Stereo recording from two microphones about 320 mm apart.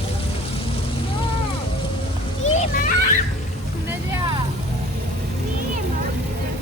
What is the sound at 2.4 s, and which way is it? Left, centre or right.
Children playing, left.